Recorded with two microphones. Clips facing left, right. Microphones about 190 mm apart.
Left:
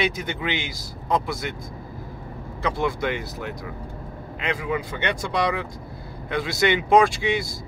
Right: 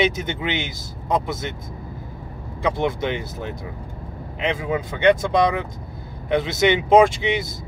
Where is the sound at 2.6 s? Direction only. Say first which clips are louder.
Right 3 dB; 20° right (ahead or behind).